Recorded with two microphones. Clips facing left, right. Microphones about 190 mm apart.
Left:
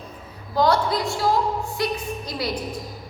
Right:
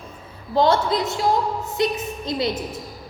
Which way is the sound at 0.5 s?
25° right (ahead or behind).